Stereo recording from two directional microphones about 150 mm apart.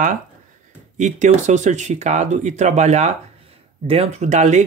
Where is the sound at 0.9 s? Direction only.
55° right (ahead or behind).